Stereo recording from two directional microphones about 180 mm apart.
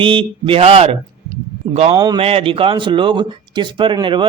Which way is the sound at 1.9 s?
20° right (ahead or behind).